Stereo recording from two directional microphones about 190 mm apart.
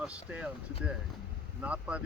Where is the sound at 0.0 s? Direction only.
5° right (ahead or behind).